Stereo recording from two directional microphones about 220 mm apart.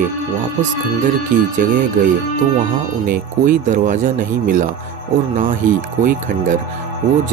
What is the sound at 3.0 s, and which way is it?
Speech, 40° right (ahead or behind).